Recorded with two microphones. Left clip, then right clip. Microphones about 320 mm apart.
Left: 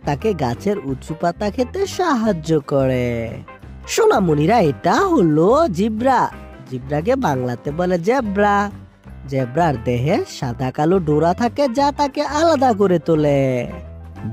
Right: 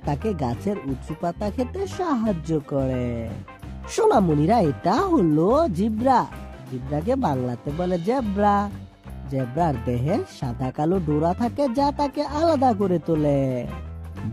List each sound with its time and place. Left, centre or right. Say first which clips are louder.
0.0 s speech: left 6 dB; left